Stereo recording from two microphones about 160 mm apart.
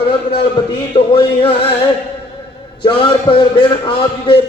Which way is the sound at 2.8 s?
35° left (ahead or behind).